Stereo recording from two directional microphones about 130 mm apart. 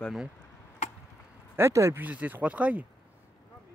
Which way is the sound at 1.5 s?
20° right (ahead or behind).